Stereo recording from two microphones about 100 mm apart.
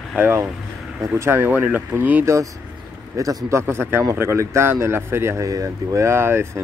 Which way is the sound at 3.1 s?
35° right (ahead or behind).